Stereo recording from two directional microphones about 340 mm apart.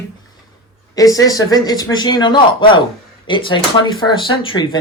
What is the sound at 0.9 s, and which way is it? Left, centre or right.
Speech, centre.